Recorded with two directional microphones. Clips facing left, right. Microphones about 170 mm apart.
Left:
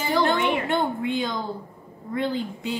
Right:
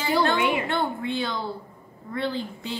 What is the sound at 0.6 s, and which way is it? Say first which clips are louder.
A woman's voice: left 2 dB; 15° left (ahead or behind).